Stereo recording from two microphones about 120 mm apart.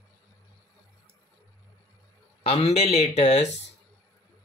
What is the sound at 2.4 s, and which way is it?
Speech, 60° left (ahead or behind).